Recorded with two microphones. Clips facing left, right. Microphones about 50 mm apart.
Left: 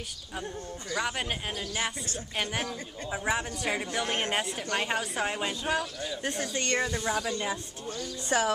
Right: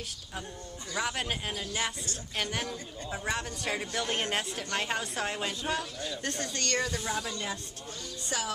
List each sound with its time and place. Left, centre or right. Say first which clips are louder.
0.9 s speech: left 1 dB; centre
8.3 s speech: left 8 dB; left